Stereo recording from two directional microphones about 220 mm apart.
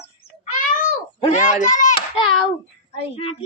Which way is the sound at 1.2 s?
35° left (ahead or behind).